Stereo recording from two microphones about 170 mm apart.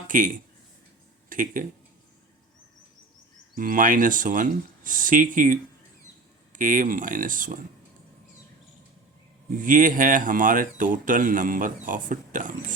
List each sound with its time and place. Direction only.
0.1 s speech: 55° right (ahead or behind)
1.3 s speech: 50° right (ahead or behind)
3.5 s speech: 55° right (ahead or behind)
9.6 s speech: 55° right (ahead or behind)